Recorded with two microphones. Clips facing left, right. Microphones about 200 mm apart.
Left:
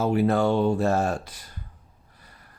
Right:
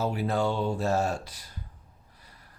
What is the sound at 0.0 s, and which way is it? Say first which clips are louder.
Speech: left 6 dB; 60° left (ahead or behind).